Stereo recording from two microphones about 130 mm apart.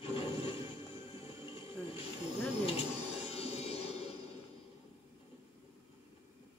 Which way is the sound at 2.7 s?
50° left (ahead or behind).